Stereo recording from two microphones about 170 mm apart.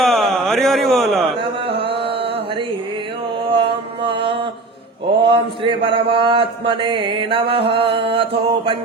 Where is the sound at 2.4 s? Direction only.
30° right (ahead or behind).